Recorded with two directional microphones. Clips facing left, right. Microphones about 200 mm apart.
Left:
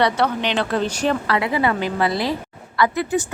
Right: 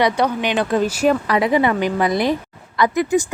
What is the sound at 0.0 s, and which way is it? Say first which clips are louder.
A woman's voice: right 1 dB; 15° right (ahead or behind).